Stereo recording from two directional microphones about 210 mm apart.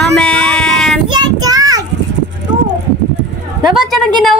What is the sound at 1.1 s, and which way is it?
Child singing, 20° right (ahead or behind).